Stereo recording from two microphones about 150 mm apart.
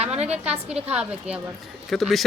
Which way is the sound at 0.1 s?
5° right (ahead or behind).